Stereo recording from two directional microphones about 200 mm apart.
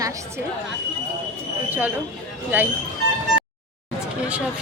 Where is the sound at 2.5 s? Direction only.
10° right (ahead or behind).